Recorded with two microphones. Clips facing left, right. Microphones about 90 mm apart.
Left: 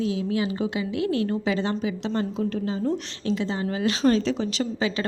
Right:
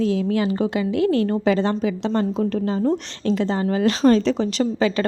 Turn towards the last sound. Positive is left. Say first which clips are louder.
# right 6 dB
turn(degrees=-45)  # may be behind; listen again after turning